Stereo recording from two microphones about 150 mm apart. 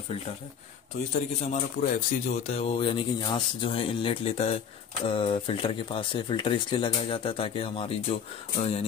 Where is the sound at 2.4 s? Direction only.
45° left (ahead or behind).